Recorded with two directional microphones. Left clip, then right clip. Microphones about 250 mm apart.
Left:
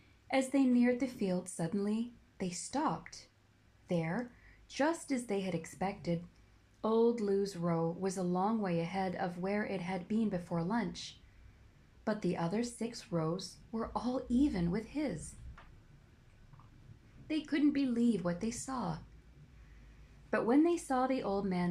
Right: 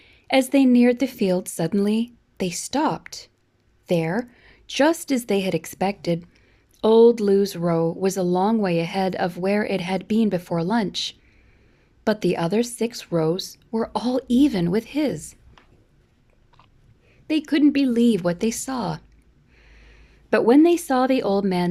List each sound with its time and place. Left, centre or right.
0.3 s speech: right
17.2 s speech: right
20.3 s speech: right